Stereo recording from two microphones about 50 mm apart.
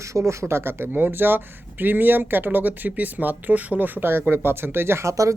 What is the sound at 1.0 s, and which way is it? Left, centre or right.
Speech, right.